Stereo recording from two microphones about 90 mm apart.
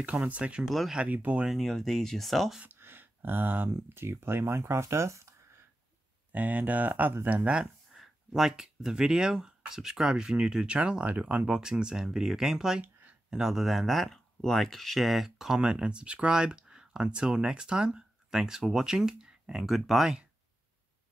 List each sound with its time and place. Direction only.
0.0 s speech: 15° right (ahead or behind)
0.7 s speech: centre (ahead or behind)
0.9 s speech: 20° right (ahead or behind)
1.4 s speech: centre (ahead or behind)
2.6 s speech: 25° right (ahead or behind)
6.3 s speech: 15° right (ahead or behind)
7.9 s speech: 5° right (ahead or behind)